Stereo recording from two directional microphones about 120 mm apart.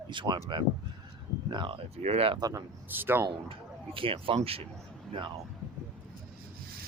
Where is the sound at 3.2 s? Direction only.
45° right (ahead or behind).